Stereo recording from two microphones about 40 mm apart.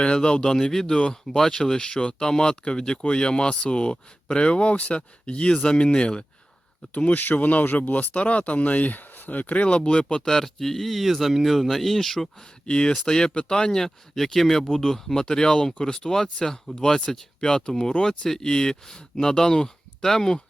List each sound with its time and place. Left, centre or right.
0.0 s speech: left
6.9 s speech: left
10.2 s speech: centre
12.6 s speech: left